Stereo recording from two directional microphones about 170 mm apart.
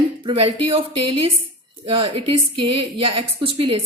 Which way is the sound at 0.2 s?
30° right (ahead or behind).